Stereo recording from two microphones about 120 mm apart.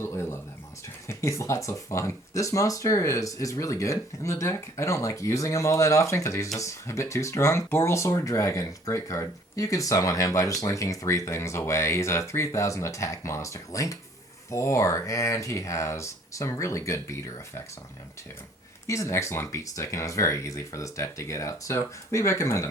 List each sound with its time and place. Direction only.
0.0 s a sound: 20° left (ahead or behind)
1.0 s speech: 25° left (ahead or behind)
18.9 s speech: 25° left (ahead or behind)